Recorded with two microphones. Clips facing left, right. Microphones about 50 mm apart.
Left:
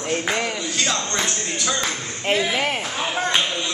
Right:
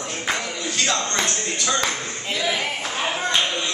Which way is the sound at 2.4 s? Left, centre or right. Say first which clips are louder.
Left 2 dB; left.